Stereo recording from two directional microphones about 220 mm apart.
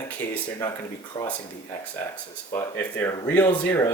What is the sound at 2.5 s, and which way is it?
Speech, 10° left (ahead or behind).